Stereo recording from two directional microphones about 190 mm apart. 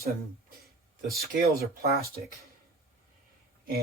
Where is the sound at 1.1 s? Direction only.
55° right (ahead or behind).